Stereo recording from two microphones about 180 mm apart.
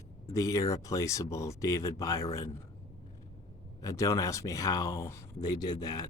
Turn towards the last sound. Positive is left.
turn(degrees=20)  # may be behind; listen again after turning